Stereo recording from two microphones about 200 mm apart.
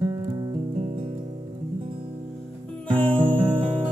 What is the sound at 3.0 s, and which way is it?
Music, 25° right (ahead or behind).